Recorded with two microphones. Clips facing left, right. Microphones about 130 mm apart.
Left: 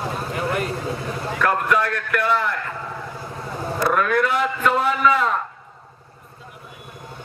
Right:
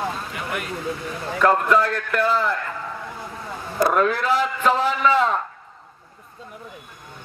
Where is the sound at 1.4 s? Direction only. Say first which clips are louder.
Right 3 dB; 30° right (ahead or behind).